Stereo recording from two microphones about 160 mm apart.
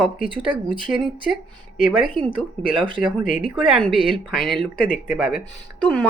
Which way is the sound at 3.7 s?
Centre (ahead or behind).